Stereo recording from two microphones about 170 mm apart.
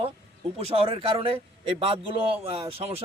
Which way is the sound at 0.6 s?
35° right (ahead or behind).